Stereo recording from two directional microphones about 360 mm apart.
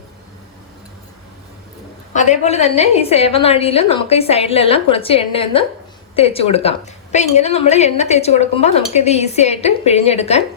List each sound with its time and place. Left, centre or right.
2.1 s a woman's voice: centre